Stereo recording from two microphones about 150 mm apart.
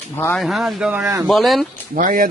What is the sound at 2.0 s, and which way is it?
Speech, 65° right (ahead or behind).